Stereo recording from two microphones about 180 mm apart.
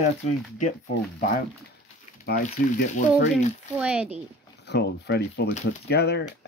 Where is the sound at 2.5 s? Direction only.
55° left (ahead or behind).